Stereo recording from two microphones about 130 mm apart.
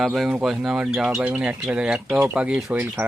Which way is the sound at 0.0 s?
Centre (ahead or behind).